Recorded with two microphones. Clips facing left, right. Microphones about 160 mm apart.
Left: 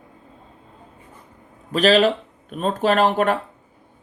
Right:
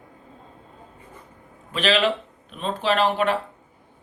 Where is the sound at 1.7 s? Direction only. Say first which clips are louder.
Left 5 dB; 40° left (ahead or behind).